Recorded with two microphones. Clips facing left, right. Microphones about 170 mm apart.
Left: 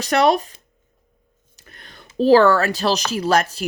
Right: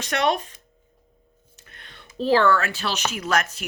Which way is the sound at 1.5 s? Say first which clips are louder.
Left 3 dB; 40° left (ahead or behind).